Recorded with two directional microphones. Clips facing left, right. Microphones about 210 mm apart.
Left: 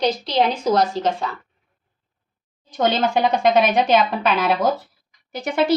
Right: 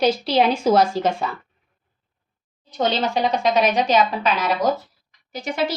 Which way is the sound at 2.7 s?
50° left (ahead or behind).